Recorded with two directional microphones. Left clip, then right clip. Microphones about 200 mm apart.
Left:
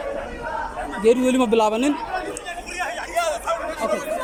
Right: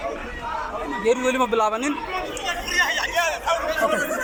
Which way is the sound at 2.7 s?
Centre (ahead or behind).